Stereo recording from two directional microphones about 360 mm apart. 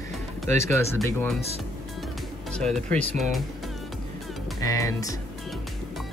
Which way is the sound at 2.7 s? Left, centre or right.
Centre.